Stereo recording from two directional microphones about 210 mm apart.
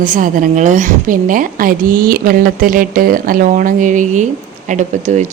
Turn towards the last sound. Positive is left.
turn(degrees=-35)  # may be behind; listen again after turning